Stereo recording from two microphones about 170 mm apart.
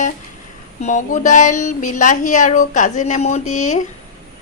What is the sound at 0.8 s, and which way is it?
A woman's voice, 45° left (ahead or behind).